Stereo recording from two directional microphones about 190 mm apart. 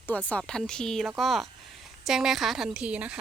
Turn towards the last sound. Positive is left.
turn(degrees=-5)  # may be behind; listen again after turning